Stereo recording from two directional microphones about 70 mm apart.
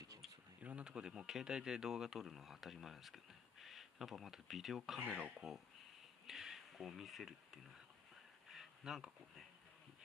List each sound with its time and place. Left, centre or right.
0.6 s speech: centre
5.0 s speech: centre
6.2 s speech: centre
8.5 s a sound: centre